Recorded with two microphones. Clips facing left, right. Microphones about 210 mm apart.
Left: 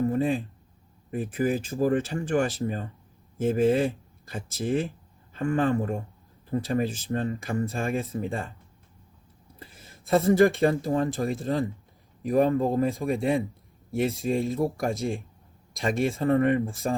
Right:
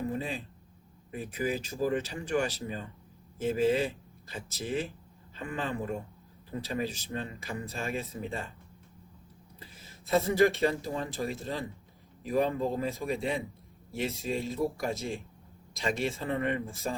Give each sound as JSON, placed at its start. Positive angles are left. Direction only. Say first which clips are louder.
{"t": 0.1, "sound": "a sound", "louder": "left 9 dB", "side_deg": 50}
{"t": 1.1, "sound": "speech", "louder": "left 6 dB", "side_deg": 50}
{"t": 10.1, "sound": "speech", "louder": "left 5 dB", "side_deg": 50}